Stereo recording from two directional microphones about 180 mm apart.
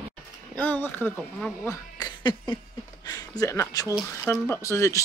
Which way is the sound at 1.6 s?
20° left (ahead or behind).